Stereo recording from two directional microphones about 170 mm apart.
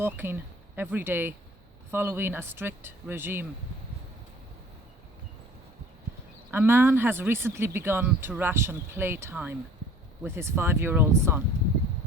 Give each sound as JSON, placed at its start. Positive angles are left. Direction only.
{"t": 0.0, "sound": "speech", "side_deg": -10}
{"t": 6.5, "sound": "speech", "side_deg": -10}